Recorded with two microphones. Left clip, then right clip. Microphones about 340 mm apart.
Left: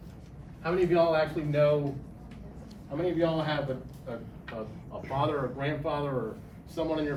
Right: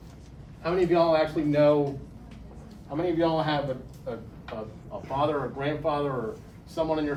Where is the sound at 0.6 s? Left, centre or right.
Right.